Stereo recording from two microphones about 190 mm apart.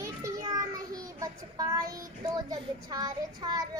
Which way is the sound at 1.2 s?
20° right (ahead or behind).